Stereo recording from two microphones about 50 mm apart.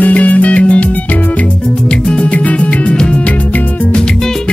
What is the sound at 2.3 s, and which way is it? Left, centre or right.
Music, left.